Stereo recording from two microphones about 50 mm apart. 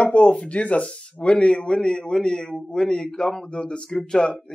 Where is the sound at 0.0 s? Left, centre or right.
Left.